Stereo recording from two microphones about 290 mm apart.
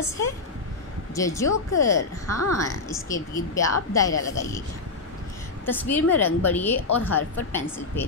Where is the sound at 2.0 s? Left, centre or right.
Left.